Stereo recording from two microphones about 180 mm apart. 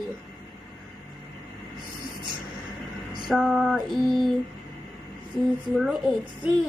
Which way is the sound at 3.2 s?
5° right (ahead or behind).